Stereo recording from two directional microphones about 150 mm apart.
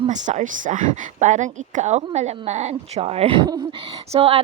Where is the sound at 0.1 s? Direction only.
55° right (ahead or behind).